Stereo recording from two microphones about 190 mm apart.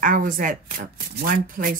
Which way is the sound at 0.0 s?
45° right (ahead or behind).